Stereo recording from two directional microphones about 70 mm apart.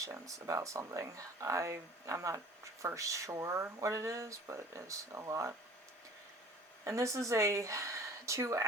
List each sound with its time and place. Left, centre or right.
0.0 s speech: right
6.8 s speech: right